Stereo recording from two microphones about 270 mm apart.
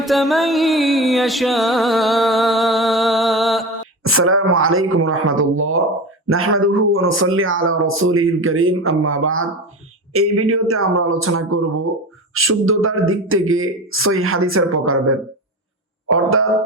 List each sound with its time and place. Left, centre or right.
0.0 s music: centre
4.0 s speech: right